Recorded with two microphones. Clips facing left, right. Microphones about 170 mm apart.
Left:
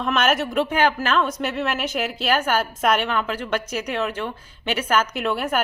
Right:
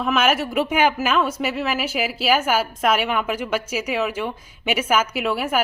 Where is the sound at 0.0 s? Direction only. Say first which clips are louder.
Right 1 dB; centre (ahead or behind).